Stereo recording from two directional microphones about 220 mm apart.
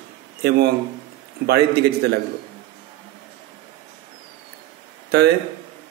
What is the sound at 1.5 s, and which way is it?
Speech, 45° right (ahead or behind).